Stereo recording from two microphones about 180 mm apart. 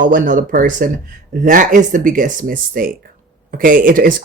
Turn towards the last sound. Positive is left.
turn(degrees=-50)  # may be behind; listen again after turning